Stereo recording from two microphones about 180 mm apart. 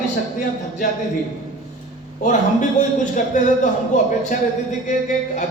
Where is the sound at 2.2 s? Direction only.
45° left (ahead or behind).